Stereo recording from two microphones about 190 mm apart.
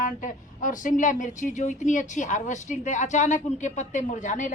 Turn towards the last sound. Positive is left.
turn(degrees=40)  # may be behind; listen again after turning